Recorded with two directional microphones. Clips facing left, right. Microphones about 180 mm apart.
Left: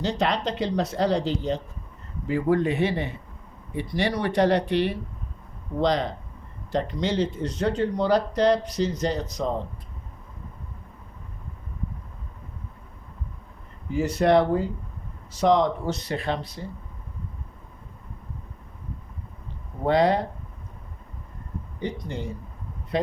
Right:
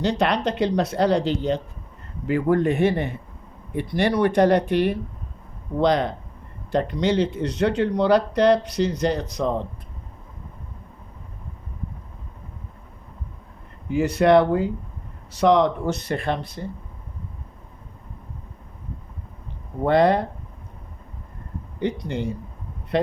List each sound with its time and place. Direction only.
0.0 s speech: 65° right (ahead or behind)
13.9 s speech: 65° right (ahead or behind)
19.9 s speech: 55° right (ahead or behind)
21.8 s speech: 70° right (ahead or behind)